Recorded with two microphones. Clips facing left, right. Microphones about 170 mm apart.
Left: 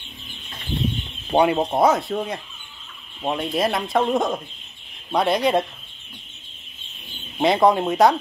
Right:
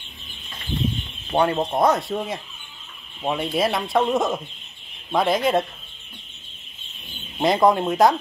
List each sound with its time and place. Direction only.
1.3 s speech: 15° left (ahead or behind)
7.3 s speech: centre (ahead or behind)